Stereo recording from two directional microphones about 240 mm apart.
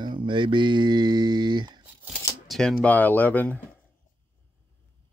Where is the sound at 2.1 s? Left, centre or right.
Centre.